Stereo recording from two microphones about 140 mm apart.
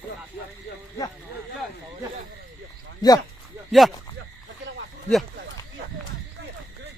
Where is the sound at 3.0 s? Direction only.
30° left (ahead or behind).